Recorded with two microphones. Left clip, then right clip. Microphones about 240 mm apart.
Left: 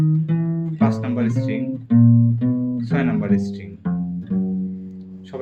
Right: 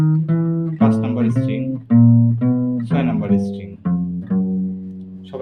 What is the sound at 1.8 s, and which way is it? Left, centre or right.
Music, right.